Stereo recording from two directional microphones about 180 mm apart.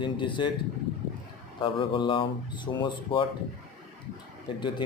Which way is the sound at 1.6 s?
30° left (ahead or behind).